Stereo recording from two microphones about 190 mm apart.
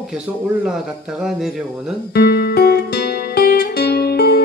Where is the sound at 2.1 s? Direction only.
55° left (ahead or behind).